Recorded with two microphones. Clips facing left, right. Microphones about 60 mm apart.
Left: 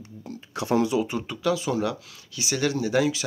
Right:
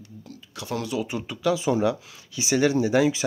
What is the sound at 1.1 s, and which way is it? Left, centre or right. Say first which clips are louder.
Speech: right 1 dB; centre.